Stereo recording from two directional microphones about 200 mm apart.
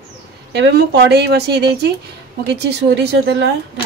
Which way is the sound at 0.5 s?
60° right (ahead or behind).